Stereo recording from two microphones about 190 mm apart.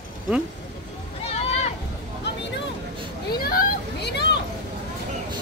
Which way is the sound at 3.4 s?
50° left (ahead or behind).